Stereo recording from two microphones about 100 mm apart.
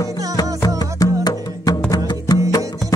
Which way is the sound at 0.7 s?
40° left (ahead or behind).